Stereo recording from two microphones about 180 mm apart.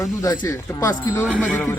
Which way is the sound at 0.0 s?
20° left (ahead or behind).